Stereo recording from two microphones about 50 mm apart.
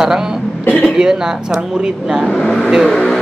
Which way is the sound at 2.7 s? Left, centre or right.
Centre.